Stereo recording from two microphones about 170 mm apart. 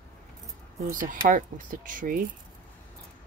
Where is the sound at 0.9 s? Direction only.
50° right (ahead or behind).